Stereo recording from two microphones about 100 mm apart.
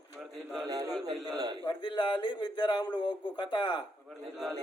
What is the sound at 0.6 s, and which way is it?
Speech, 40° right (ahead or behind).